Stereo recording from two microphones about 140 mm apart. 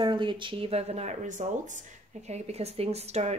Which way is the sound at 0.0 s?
35° right (ahead or behind).